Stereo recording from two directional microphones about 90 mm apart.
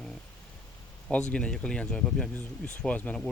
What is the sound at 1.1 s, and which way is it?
Speech, 10° left (ahead or behind).